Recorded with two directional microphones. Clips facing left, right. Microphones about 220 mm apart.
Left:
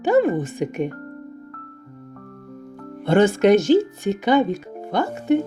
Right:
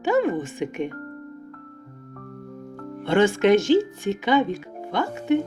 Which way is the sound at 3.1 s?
40° left (ahead or behind).